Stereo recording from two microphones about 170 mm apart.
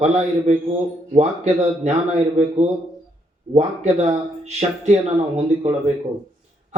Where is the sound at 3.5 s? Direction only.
40° right (ahead or behind).